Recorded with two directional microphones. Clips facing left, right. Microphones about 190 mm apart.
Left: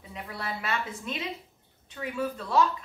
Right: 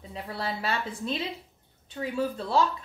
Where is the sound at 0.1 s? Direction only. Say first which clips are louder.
Right 3 dB; 30° right (ahead or behind).